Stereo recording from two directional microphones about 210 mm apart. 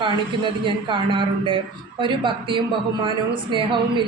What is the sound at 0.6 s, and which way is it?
A woman's voice, 20° right (ahead or behind).